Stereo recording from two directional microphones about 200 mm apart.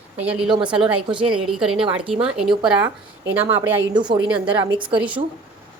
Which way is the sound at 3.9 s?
20° right (ahead or behind).